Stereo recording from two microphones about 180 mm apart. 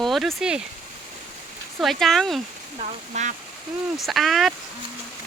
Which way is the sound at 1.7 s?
Centre (ahead or behind).